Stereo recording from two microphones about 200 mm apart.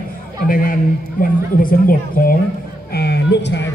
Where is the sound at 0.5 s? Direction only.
45° left (ahead or behind).